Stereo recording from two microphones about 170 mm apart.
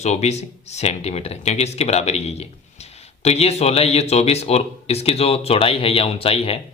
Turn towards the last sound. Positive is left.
turn(degrees=35)  # may be behind; listen again after turning